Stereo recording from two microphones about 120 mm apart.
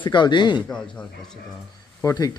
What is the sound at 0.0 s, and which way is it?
Speech, 40° left (ahead or behind).